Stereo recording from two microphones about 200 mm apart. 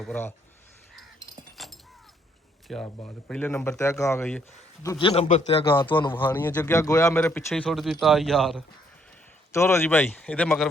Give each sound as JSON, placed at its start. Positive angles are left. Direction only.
{"t": 0.0, "sound": "speech", "side_deg": 10}
{"t": 1.5, "sound": "a sound", "side_deg": 0}
{"t": 2.6, "sound": "speech", "side_deg": 5}
{"t": 4.8, "sound": "a man's voice", "side_deg": 20}
{"t": 6.1, "sound": "a man's voice", "side_deg": 10}
{"t": 9.5, "sound": "speech", "side_deg": 15}